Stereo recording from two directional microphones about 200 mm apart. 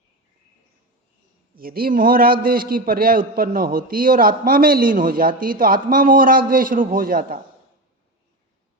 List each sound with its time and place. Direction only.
1.5 s a man's voice: 45° right (ahead or behind)